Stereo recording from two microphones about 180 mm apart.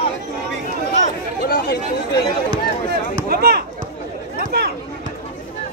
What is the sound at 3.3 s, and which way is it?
Chop, 60° right (ahead or behind).